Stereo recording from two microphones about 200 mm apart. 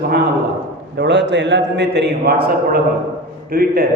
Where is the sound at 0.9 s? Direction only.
60° right (ahead or behind).